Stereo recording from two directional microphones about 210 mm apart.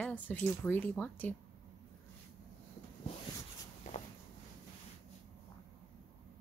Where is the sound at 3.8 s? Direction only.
35° left (ahead or behind).